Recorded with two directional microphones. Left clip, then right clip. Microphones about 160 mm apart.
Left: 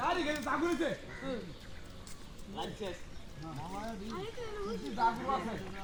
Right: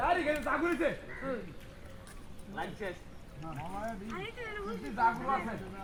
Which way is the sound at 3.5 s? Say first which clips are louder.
Right 3 dB; 15° right (ahead or behind).